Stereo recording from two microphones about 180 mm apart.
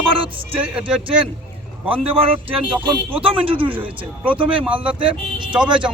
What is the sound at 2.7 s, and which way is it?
Speech, 10° right (ahead or behind).